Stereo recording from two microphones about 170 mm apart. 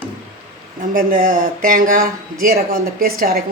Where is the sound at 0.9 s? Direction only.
50° right (ahead or behind).